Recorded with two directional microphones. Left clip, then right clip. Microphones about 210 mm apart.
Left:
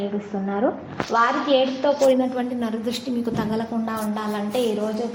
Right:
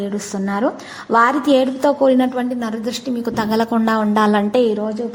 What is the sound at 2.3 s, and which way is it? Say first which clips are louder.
A woman's voice: right 4 dB; 25° right (ahead or behind).